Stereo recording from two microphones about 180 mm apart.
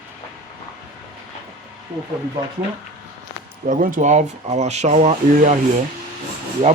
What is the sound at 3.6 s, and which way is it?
Speech, 45° right (ahead or behind).